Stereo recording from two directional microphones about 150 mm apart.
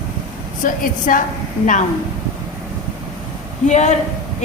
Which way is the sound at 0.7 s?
65° left (ahead or behind).